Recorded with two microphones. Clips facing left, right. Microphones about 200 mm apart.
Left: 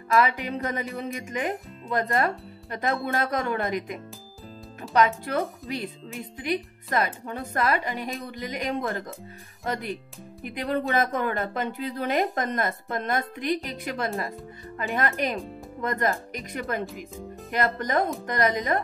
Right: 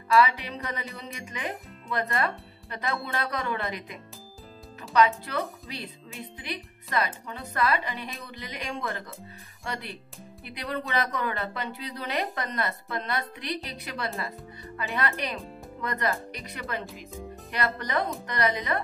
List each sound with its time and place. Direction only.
0.2 s a woman's voice: 50° left (ahead or behind)